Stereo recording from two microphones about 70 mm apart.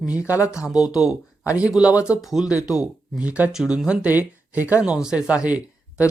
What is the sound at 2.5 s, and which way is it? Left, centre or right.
Speech, centre.